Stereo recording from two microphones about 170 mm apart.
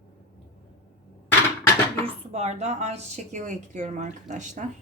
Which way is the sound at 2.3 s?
40° right (ahead or behind).